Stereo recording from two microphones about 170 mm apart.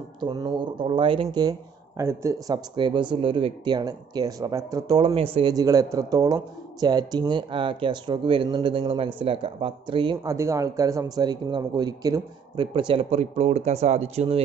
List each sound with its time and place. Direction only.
0.2 s speech: 25° right (ahead or behind)
5.5 s speech: 20° right (ahead or behind)
10.1 s speech: 15° right (ahead or behind); by 14.4 s 35° right (ahead or behind)